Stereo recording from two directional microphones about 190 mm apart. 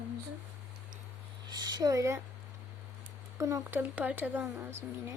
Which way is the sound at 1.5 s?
20° right (ahead or behind).